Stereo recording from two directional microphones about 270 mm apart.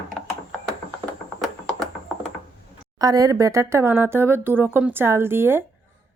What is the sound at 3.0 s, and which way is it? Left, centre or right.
Speech, centre.